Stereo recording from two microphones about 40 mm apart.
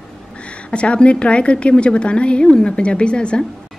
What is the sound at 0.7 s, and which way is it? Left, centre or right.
A woman's voice, left.